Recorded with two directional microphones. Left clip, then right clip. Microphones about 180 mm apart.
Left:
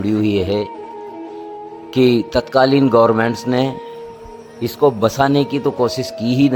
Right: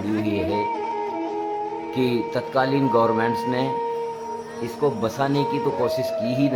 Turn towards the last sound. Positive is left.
turn(degrees=45)  # may be behind; listen again after turning